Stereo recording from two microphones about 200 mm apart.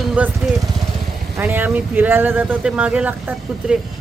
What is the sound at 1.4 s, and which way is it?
Speech, 10° right (ahead or behind).